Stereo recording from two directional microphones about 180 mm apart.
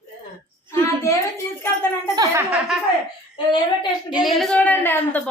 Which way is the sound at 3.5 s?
25° left (ahead or behind).